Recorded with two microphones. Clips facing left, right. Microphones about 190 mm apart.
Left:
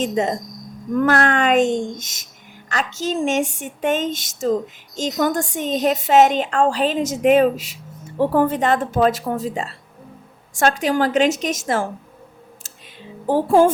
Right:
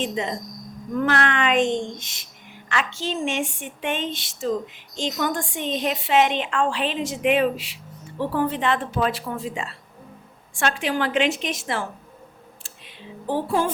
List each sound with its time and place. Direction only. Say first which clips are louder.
0.0 s a woman's voice: left 6 dB; 45° left (ahead or behind)
13.2 s a woman's voice: left 8 dB; 45° left (ahead or behind)